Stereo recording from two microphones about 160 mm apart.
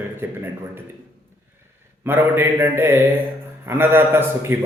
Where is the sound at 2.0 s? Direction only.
15° right (ahead or behind).